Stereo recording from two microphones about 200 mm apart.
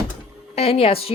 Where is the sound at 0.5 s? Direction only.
30° left (ahead or behind).